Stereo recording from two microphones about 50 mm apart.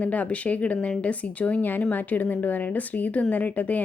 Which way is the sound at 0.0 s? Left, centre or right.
Left.